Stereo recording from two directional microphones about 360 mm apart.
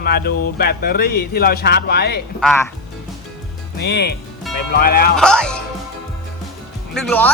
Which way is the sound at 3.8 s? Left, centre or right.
Left.